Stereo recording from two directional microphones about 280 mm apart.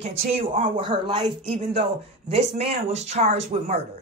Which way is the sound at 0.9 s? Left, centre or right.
Centre.